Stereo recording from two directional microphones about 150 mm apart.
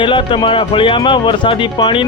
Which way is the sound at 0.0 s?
35° left (ahead or behind).